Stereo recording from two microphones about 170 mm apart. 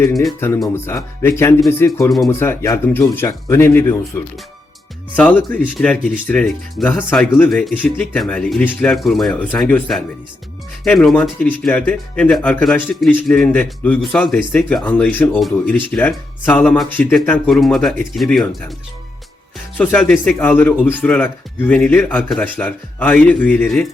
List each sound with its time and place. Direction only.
0.1 s speech: centre (ahead or behind)
0.3 s speech: 15° left (ahead or behind)
19.7 s speech: 10° left (ahead or behind)